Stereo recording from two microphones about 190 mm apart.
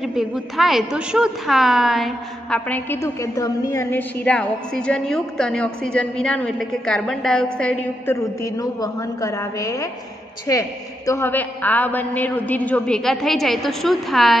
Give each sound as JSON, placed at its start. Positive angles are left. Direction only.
{"t": 0.0, "sound": "a woman's voice", "side_deg": 0}